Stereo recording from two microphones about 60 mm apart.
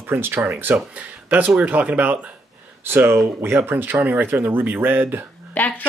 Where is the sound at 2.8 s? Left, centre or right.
Right.